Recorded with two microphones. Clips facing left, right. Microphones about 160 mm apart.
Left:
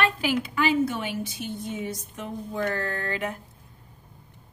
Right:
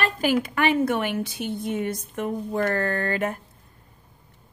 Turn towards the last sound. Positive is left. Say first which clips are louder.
# right 5 dB
turn(degrees=-50)  # may be behind; listen again after turning